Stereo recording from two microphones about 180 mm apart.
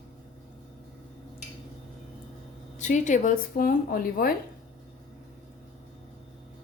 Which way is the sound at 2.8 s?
40° left (ahead or behind).